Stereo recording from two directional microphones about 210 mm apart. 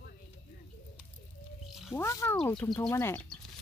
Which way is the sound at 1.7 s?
Centre (ahead or behind).